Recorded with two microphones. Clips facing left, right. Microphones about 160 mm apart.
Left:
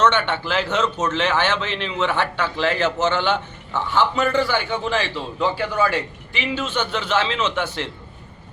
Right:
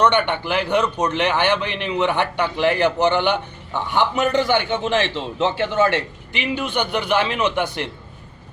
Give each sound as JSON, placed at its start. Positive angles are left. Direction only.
{"t": 0.0, "sound": "a man's voice", "side_deg": -15}